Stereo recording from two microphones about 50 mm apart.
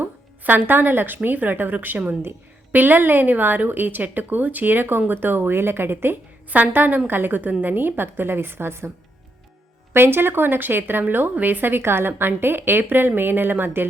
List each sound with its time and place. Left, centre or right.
0.0 s a woman's voice: right
6.5 s a woman's voice: right
9.9 s a woman's voice: right
11.0 s a woman's voice: right